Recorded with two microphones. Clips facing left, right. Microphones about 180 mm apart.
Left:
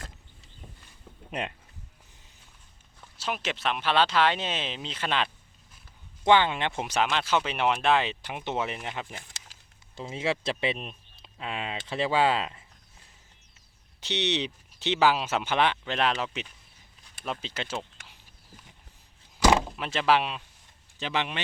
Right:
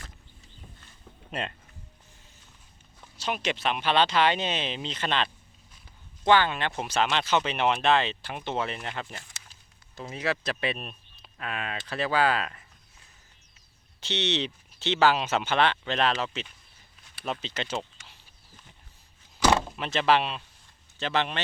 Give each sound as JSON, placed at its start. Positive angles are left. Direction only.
{"t": 1.3, "sound": "speech", "side_deg": 15}
{"t": 3.0, "sound": "speech", "side_deg": 0}
{"t": 6.2, "sound": "speech", "side_deg": 20}
{"t": 7.1, "sound": "speech", "side_deg": 5}
{"t": 9.9, "sound": "speech", "side_deg": 25}
{"t": 14.0, "sound": "speech", "side_deg": 15}
{"t": 19.5, "sound": "speech", "side_deg": 5}